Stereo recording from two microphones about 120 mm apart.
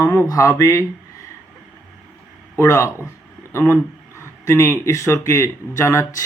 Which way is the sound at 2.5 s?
20° left (ahead or behind).